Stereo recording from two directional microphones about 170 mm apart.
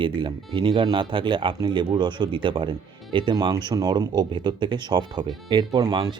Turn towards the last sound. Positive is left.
turn(degrees=-25)  # may be behind; listen again after turning